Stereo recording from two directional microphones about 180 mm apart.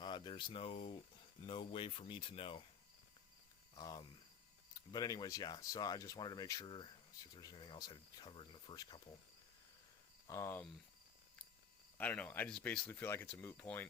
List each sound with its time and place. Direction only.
0.0 s speech: 25° left (ahead or behind)
3.8 s speech: 20° left (ahead or behind)
10.2 s speech: 15° left (ahead or behind)
11.9 s speech: 10° left (ahead or behind)